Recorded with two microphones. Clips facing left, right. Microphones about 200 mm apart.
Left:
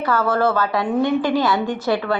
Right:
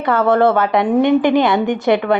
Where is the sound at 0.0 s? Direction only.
25° right (ahead or behind).